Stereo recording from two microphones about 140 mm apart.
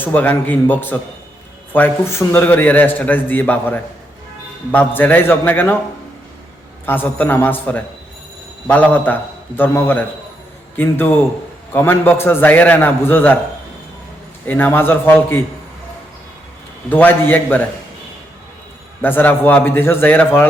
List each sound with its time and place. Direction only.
0.0 s a man's voice: 10° left (ahead or behind)
6.8 s a man's voice: 15° left (ahead or behind)
14.4 s a man's voice: 15° left (ahead or behind)
16.9 s a man's voice: 15° left (ahead or behind)
19.0 s a man's voice: 15° left (ahead or behind)